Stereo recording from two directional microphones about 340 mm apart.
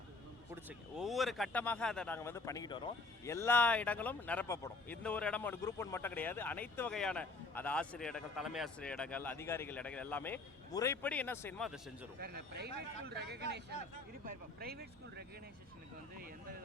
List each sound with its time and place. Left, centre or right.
0.5 s speech: centre
12.2 s speech: right